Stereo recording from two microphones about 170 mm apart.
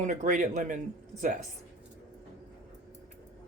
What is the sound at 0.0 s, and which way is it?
Speech, 45° right (ahead or behind).